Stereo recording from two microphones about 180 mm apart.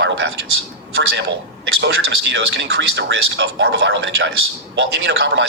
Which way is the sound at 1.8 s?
85° right.